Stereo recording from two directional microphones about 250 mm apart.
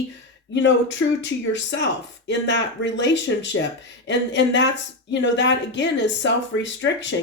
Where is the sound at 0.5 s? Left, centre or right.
Left.